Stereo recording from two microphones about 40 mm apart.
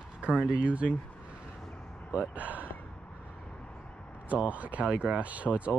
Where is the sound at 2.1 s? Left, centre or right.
Right.